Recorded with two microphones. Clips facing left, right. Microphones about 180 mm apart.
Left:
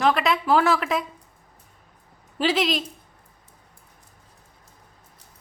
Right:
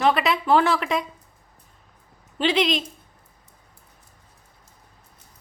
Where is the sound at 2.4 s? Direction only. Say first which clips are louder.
Right 1 dB; 5° left (ahead or behind).